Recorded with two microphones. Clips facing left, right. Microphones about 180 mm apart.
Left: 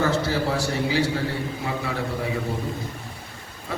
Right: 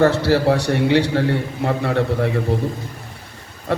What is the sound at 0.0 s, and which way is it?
A man's voice, 70° right (ahead or behind).